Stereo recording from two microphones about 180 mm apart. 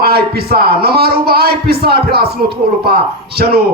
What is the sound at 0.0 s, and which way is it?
A man's voice, 60° right (ahead or behind).